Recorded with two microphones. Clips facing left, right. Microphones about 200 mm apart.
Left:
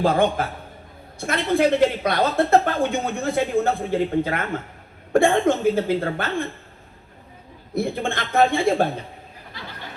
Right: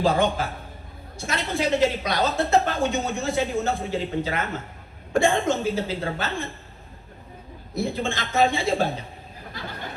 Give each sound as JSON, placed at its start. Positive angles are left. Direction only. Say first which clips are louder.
{"t": 0.0, "sound": "a woman's voice", "louder": "left 2 dB", "side_deg": 55}
{"t": 8.1, "sound": "a woman's voice", "louder": "left 4 dB", "side_deg": 55}
{"t": 9.5, "sound": "a sound", "louder": "right 2 dB", "side_deg": -45}